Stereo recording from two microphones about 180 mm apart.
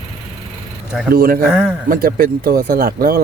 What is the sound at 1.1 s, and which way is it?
Speech, 55° right (ahead or behind).